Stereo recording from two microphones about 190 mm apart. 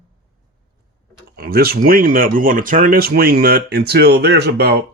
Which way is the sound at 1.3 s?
55° right (ahead or behind).